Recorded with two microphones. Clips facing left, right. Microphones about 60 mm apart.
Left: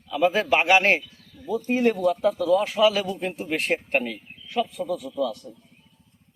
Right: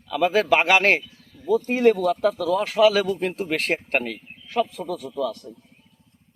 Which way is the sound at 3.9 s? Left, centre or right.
Right.